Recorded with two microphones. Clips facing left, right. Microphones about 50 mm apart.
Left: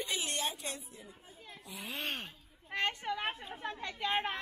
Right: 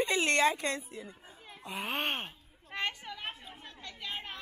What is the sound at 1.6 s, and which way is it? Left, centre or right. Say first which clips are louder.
Speech: right 6 dB; right.